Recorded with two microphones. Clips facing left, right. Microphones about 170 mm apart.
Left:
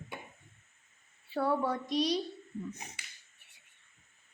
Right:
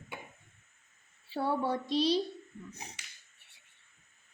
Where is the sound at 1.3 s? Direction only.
30° right (ahead or behind).